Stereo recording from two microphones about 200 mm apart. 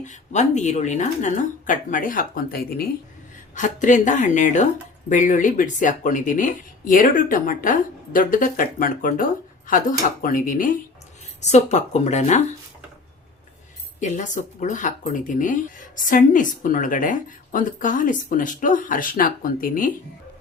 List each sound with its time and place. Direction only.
0.0 s speech: 35° left (ahead or behind)
14.0 s speech: 35° left (ahead or behind)